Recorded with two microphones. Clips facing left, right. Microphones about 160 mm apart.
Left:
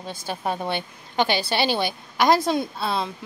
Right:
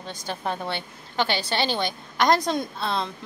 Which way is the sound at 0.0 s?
10° left (ahead or behind).